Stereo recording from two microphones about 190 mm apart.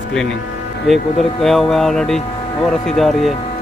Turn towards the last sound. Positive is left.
turn(degrees=0)  # may be behind; listen again after turning